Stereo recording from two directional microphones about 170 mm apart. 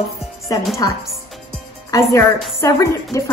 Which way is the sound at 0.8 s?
20° left (ahead or behind).